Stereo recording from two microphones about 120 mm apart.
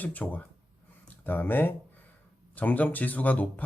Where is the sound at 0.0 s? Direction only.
15° left (ahead or behind).